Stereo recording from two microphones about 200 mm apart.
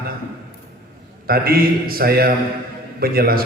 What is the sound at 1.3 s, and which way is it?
A man's voice, 50° right (ahead or behind).